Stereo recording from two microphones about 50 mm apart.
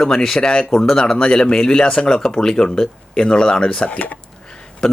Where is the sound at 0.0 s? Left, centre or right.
Centre; by 4.2 s left.